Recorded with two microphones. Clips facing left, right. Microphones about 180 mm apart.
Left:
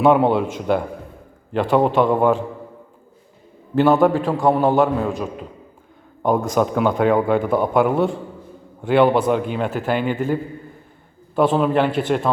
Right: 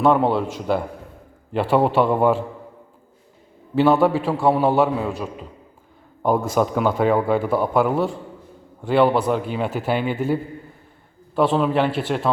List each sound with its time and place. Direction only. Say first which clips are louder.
0.0 s a man's voice: left 2 dB; 5° left (ahead or behind)
4.3 s a man's voice: left 1 dB; 5° right (ahead or behind)
6.2 s a man's voice: left 1 dB; 5° right (ahead or behind)